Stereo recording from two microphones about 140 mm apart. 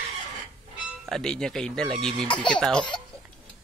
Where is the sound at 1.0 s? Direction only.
5° left (ahead or behind).